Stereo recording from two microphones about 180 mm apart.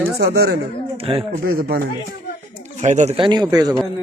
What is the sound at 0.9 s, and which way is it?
Speech, 30° right (ahead or behind).